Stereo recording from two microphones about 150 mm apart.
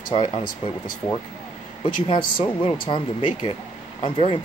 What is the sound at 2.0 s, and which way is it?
Speech, 35° left (ahead or behind).